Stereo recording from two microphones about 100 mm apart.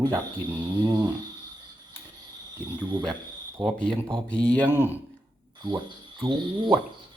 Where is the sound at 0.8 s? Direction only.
40° right (ahead or behind).